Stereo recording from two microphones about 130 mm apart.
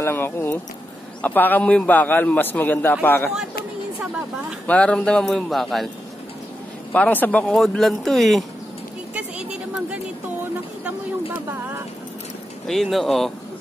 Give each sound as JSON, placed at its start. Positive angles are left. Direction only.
{"t": 0.0, "sound": "a man's voice", "side_deg": 20}
{"t": 4.6, "sound": "speech", "side_deg": 10}
{"t": 6.9, "sound": "a man's voice", "side_deg": 15}
{"t": 12.6, "sound": "speech", "side_deg": 0}